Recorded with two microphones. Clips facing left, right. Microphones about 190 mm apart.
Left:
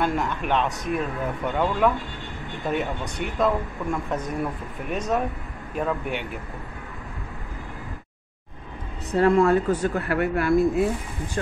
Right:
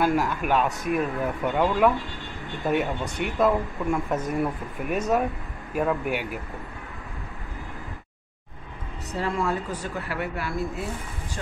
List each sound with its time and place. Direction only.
0.0 s speech: 5° right (ahead or behind)
9.1 s speech: 60° left (ahead or behind)